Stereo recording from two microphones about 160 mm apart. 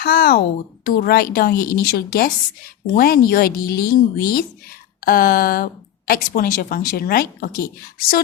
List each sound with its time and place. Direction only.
0.0 s speech: 70° left (ahead or behind)
5.0 s speech: 65° left (ahead or behind)